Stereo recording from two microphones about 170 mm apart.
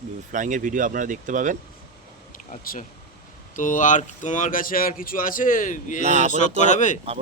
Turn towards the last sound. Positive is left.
turn(degrees=45)  # may be behind; listen again after turning